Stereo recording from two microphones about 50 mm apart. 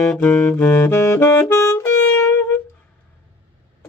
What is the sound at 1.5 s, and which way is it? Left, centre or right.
Saxophone, left.